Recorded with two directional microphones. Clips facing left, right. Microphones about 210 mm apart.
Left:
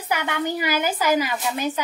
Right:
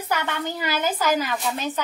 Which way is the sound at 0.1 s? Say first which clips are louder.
Left 3 dB; 15° left (ahead or behind).